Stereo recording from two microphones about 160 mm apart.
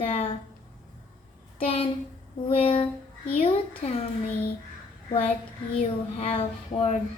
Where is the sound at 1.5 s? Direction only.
40° left (ahead or behind).